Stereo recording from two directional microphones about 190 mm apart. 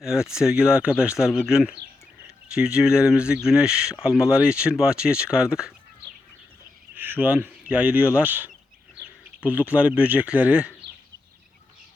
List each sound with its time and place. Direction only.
0.0 s speech: 5° right (ahead or behind)
6.9 s speech: 10° right (ahead or behind)